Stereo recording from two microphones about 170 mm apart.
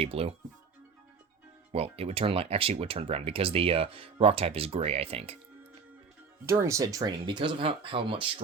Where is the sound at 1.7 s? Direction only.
35° right (ahead or behind).